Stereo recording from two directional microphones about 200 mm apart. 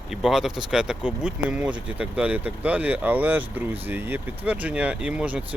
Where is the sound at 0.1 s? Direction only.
Centre (ahead or behind).